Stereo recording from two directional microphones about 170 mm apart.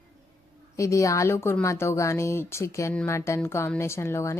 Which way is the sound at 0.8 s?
20° left (ahead or behind).